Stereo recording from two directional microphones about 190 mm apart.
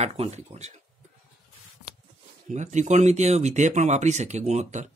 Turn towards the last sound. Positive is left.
turn(degrees=-40)  # may be behind; listen again after turning